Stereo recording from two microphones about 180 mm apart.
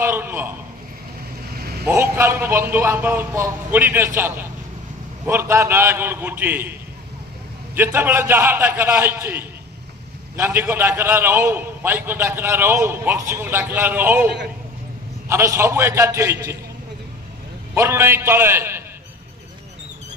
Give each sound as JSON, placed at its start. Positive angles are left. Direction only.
{"t": 0.0, "sound": "a man's voice", "side_deg": -10}
{"t": 1.6, "sound": "vehicle", "side_deg": -60}
{"t": 1.9, "sound": "a man's voice", "side_deg": -15}
{"t": 7.7, "sound": "a man's voice", "side_deg": -10}
{"t": 17.7, "sound": "a man's voice", "side_deg": -15}